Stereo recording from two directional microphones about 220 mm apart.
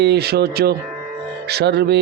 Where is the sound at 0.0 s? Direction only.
50° right (ahead or behind).